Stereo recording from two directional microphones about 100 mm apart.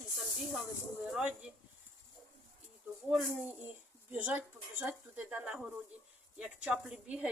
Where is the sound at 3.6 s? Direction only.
15° right (ahead or behind).